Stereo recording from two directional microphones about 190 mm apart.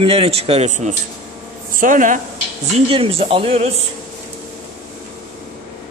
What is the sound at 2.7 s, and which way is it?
Speech, 30° right (ahead or behind).